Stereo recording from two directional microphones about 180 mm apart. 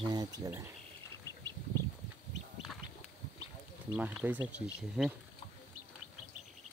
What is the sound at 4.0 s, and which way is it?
Speech, 10° right (ahead or behind).